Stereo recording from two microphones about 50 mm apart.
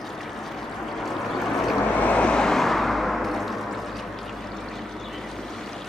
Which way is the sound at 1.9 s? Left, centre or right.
Left.